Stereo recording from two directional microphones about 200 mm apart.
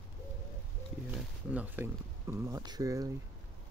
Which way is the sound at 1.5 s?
10° right (ahead or behind).